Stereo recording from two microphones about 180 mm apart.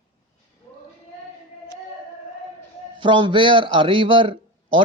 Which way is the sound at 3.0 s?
25° right (ahead or behind).